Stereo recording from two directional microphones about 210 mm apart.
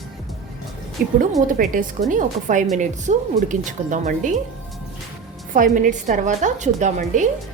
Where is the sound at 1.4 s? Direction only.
40° right (ahead or behind).